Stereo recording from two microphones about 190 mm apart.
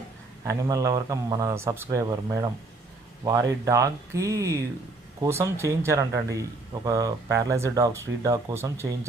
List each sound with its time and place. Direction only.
0.4 s speech: 15° right (ahead or behind)
3.7 s speech: 15° right (ahead or behind)